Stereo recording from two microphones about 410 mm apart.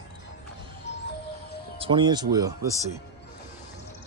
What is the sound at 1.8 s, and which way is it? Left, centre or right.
Speech, centre.